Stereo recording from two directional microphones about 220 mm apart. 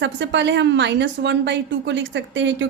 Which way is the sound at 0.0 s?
55° right (ahead or behind).